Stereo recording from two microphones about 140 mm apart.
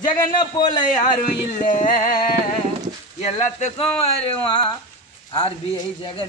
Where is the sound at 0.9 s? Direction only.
65° left (ahead or behind).